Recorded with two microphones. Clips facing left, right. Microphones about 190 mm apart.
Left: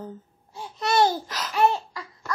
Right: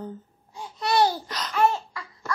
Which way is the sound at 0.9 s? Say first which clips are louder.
Left 1 dB; 45° left (ahead or behind).